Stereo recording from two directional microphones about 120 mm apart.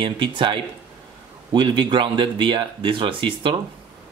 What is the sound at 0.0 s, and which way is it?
Speech, 45° right (ahead or behind).